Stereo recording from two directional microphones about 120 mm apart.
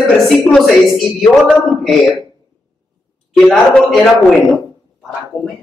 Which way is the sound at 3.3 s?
Centre (ahead or behind).